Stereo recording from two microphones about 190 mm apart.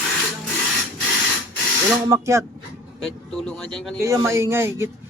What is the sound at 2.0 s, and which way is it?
Speech, 15° right (ahead or behind).